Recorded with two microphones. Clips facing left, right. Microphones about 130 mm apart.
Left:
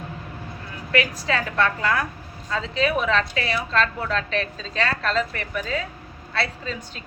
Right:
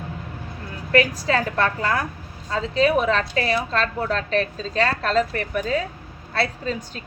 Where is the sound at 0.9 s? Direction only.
40° right (ahead or behind).